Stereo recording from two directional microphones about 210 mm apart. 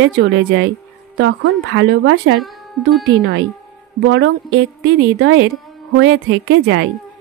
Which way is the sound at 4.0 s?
60° right (ahead or behind).